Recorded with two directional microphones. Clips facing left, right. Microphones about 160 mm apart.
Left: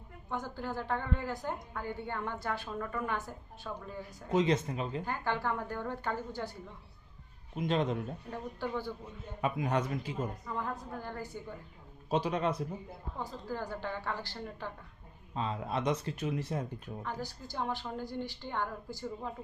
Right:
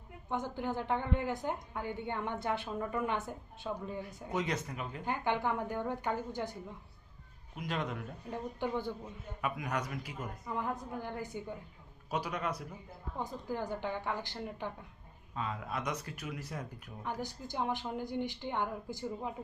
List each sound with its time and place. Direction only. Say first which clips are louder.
0.3 s a woman's voice: right 2 dB; 20° right (ahead or behind)
4.3 s speech: left 7 dB; 25° left (ahead or behind)
5.0 s a woman's voice: right 5 dB; 15° right (ahead or behind)
7.5 s speech: left 6 dB; 25° left (ahead or behind)
8.3 s a woman's voice: right 3 dB; 15° right (ahead or behind)
9.4 s speech: left 5 dB; 30° left (ahead or behind)
10.4 s a woman's voice: right 1 dB; 15° right (ahead or behind)
12.1 s speech: left 5 dB; 25° left (ahead or behind)
13.1 s a woman's voice: right 1 dB; 15° right (ahead or behind)
15.4 s speech: left 4 dB; 30° left (ahead or behind)
17.0 s a woman's voice: right 3 dB; 15° right (ahead or behind)